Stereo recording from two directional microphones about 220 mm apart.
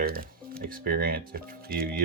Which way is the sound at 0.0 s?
40° right (ahead or behind).